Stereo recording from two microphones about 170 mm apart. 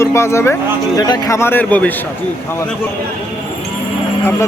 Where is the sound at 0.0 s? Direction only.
15° left (ahead or behind).